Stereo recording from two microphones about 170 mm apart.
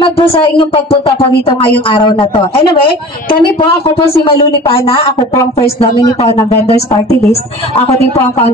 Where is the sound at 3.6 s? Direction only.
30° left (ahead or behind).